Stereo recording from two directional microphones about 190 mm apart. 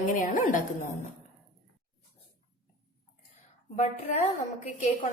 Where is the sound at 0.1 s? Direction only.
45° left (ahead or behind).